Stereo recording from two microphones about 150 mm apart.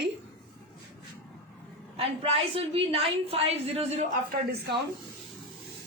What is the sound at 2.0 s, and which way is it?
A woman's voice, 40° right (ahead or behind).